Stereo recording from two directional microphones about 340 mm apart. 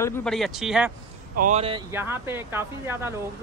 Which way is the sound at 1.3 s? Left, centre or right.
Right.